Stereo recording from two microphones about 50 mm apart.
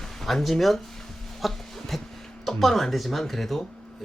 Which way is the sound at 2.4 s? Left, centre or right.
Centre.